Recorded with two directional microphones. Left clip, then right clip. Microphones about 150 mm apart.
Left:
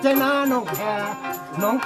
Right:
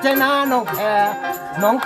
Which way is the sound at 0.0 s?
15° left (ahead or behind).